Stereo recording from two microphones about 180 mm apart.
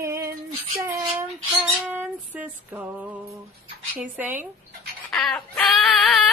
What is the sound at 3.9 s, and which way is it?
Speech, 10° right (ahead or behind).